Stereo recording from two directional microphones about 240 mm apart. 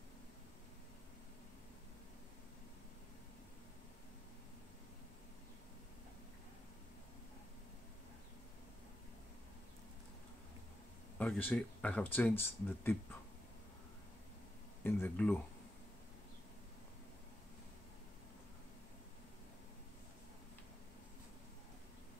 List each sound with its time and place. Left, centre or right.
11.1 s speech: centre
14.8 s speech: centre